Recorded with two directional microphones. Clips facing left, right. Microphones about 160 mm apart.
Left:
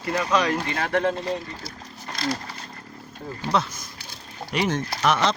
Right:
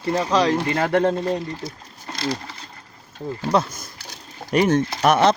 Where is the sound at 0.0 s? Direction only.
30° right (ahead or behind).